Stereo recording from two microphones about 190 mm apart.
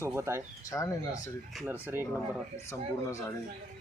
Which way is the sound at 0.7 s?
15° left (ahead or behind).